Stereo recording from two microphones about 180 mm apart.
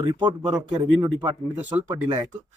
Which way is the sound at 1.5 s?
10° right (ahead or behind).